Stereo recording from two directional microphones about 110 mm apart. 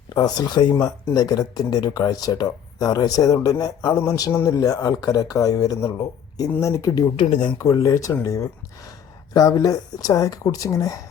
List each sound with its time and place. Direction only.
0.1 s speech: 40° left (ahead or behind)
7.2 s speech: 50° left (ahead or behind)
7.6 s speech: 30° left (ahead or behind)